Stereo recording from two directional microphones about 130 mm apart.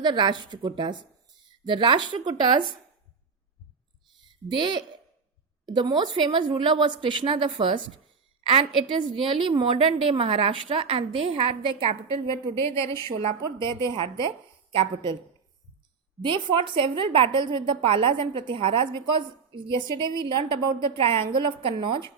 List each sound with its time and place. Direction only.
0.0 s a woman's voice: 35° right (ahead or behind)
4.3 s a woman's voice: 40° right (ahead or behind)
12.5 s a woman's voice: 20° left (ahead or behind)
13.8 s a woman's voice: 40° right (ahead or behind)
16.2 s a woman's voice: 40° right (ahead or behind)